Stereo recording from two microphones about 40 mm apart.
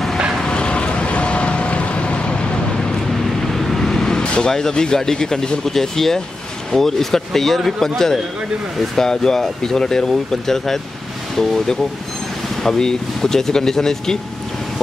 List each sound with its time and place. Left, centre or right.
0.5 s vehicle: left
3.3 s vehicle: centre
4.3 s speech: centre